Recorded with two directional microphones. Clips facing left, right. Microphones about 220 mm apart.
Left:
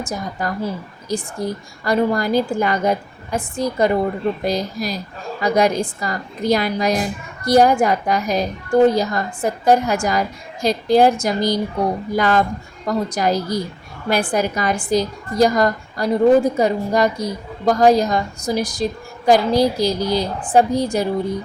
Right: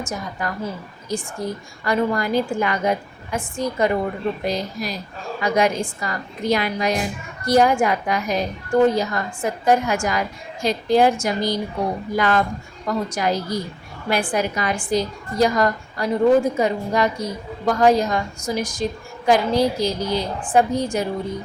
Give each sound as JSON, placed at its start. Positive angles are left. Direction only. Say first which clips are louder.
{"t": 0.0, "sound": "a woman's voice", "louder": "left 3 dB", "side_deg": 35}